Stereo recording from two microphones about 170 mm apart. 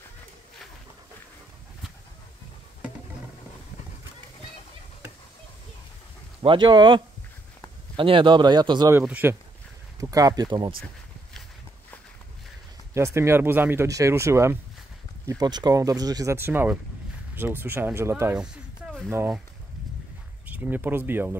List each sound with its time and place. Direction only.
6.4 s speech: 30° right (ahead or behind)
8.9 s speech: 10° right (ahead or behind)
12.9 s speech: 15° right (ahead or behind)
20.4 s speech: 10° right (ahead or behind)